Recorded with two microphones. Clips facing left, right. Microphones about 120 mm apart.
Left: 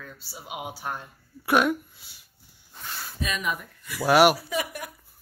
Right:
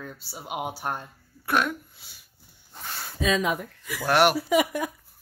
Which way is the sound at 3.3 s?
90° right.